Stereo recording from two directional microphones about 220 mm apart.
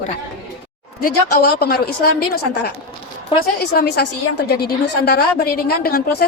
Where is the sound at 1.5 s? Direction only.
45° left (ahead or behind).